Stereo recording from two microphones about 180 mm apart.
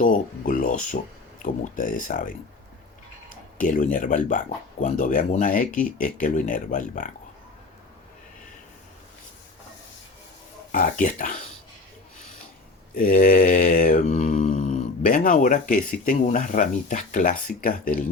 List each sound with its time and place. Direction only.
0.0 s speech: 50° left (ahead or behind)
3.6 s speech: 45° left (ahead or behind)
10.7 s speech: 45° left (ahead or behind)
13.0 s mantra: 50° left (ahead or behind)
16.0 s speech: 40° left (ahead or behind)